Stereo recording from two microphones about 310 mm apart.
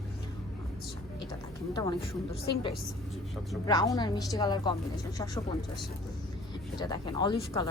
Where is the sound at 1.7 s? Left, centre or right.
Centre.